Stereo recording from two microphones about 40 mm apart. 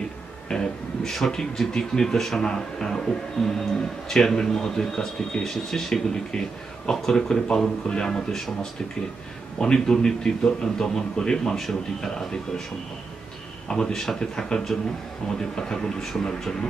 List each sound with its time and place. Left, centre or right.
0.5 s speech: centre
9.6 s speech: centre
11.5 s speech: centre
13.7 s speech: centre